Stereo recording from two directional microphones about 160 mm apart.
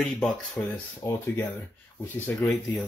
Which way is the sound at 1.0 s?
15° left (ahead or behind).